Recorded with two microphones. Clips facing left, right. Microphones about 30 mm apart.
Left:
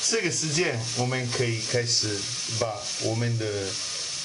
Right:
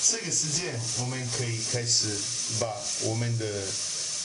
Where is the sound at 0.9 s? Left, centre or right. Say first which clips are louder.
Left 6 dB; left.